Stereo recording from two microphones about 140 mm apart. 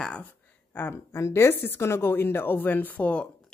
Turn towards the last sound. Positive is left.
turn(degrees=10)  # may be behind; listen again after turning